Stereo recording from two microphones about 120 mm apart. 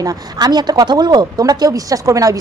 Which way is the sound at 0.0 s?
30° right (ahead or behind).